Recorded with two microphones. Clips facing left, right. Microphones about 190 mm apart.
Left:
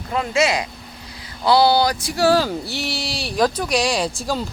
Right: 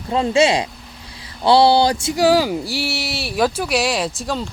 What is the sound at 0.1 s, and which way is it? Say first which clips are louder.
Speech: right 4 dB; 30° right (ahead or behind).